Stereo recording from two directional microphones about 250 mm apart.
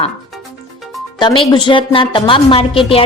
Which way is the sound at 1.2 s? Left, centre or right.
Centre.